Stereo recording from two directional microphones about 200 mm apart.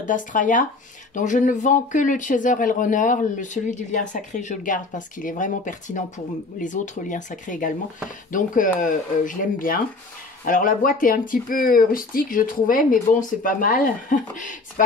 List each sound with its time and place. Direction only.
0.0 s speech: 40° left (ahead or behind)